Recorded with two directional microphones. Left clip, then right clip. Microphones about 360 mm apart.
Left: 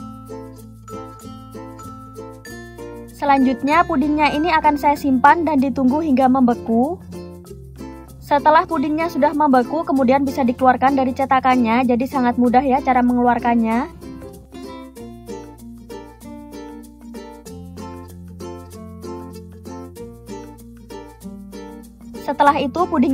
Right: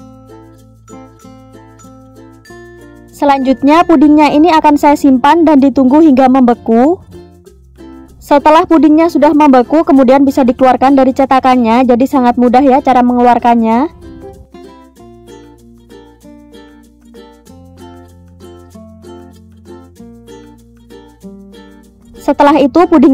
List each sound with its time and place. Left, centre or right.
3.2 s speech: right
8.3 s speech: right
22.2 s speech: right